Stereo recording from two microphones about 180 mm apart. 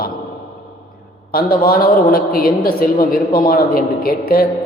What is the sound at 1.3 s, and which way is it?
A man's voice, 55° left (ahead or behind).